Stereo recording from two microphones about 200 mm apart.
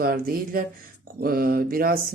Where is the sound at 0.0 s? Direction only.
45° right (ahead or behind).